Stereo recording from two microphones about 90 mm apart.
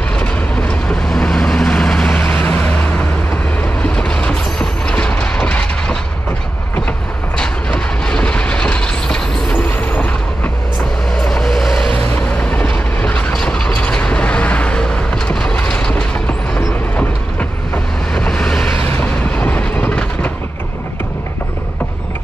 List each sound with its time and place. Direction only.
0.2 s vehicle: 10° left (ahead or behind)
3.9 s vehicle: 10° left (ahead or behind)
7.3 s train: 10° left (ahead or behind)
11.1 s vehicle: 5° left (ahead or behind)
12.4 s train: 15° left (ahead or behind)
18.1 s vehicle: 5° left (ahead or behind)
18.9 s train: 20° left (ahead or behind)